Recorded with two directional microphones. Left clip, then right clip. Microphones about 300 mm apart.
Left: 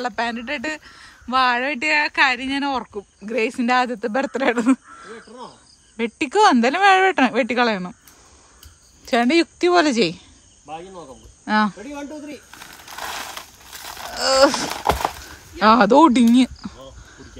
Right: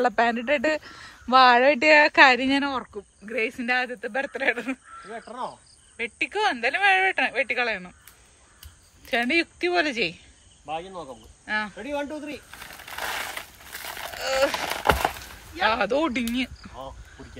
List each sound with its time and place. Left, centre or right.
0.0 s speech: centre
5.9 s speech: left
9.0 s speech: centre
11.4 s speech: centre
11.8 s coin: centre
14.7 s speech: centre